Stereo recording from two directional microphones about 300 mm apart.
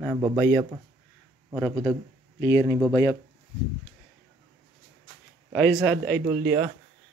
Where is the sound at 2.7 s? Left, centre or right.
Centre.